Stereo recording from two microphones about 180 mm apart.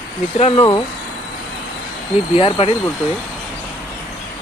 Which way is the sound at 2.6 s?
30° left (ahead or behind).